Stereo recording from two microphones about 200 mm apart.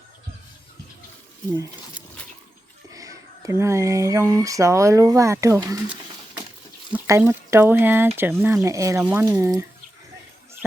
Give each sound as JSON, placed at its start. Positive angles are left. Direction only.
{"t": 2.9, "sound": "speech", "side_deg": -15}